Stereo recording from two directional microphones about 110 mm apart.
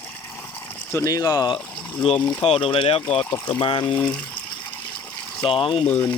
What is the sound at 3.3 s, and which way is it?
Speech, 40° left (ahead or behind).